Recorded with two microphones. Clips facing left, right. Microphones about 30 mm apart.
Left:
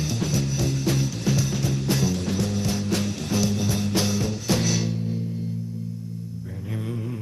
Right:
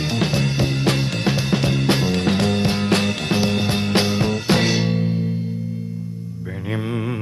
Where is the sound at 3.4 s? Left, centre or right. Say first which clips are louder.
Right 5 dB; right.